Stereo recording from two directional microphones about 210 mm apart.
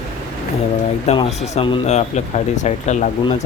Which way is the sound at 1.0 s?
30° left (ahead or behind).